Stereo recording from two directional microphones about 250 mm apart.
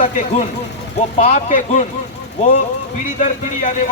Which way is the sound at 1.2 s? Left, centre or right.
Left.